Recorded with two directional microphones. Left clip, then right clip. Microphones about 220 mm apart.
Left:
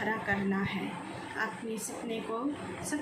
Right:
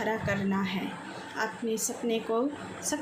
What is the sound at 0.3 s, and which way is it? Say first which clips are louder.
A woman's voice: right 1 dB; 45° right (ahead or behind).